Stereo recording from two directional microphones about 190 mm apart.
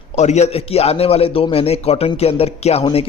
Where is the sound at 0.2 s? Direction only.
35° left (ahead or behind).